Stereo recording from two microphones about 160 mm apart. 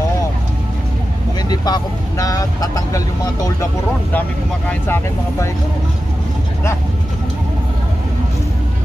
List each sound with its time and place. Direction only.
1.5 s speech: 25° left (ahead or behind)
4.6 s speech: 15° left (ahead or behind)